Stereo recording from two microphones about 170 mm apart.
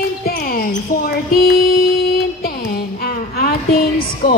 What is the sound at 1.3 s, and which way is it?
Music, 65° left (ahead or behind).